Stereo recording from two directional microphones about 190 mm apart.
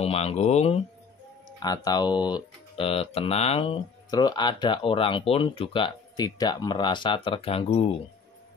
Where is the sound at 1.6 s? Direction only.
20° left (ahead or behind).